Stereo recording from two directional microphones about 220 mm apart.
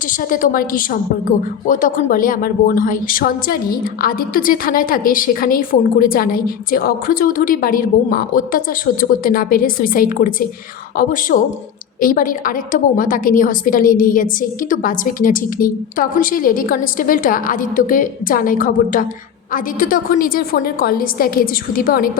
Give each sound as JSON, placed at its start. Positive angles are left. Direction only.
{"t": 0.1, "sound": "speech", "side_deg": 40}